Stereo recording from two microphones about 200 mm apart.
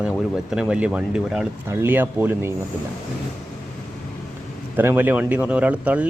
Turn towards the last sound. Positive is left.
turn(degrees=-5)  # may be behind; listen again after turning